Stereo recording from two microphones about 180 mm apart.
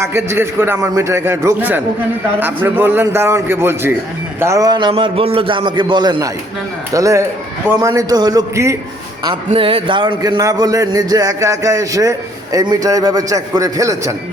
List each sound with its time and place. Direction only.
0.0 s a man's voice: 15° right (ahead or behind)
9.5 s a man's voice: 30° right (ahead or behind)